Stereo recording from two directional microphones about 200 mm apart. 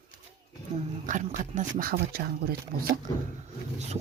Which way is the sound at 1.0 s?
40° right (ahead or behind).